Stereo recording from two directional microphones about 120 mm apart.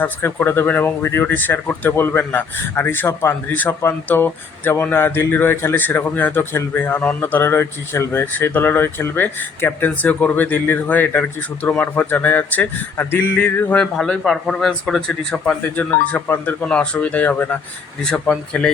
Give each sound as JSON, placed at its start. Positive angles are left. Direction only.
{"t": 0.0, "sound": "speech", "side_deg": 15}
{"t": 13.9, "sound": "speech", "side_deg": 0}